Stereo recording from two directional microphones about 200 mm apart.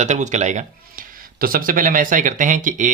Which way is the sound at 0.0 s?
35° right (ahead or behind).